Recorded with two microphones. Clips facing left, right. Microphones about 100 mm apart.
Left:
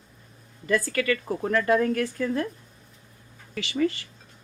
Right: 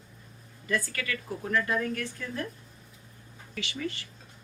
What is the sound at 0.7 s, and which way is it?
Speech, 70° left (ahead or behind).